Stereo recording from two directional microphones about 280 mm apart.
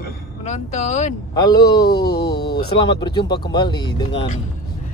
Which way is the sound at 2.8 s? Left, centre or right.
Centre.